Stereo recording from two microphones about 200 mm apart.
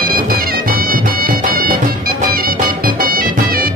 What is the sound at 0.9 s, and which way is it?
Music, 45° right (ahead or behind).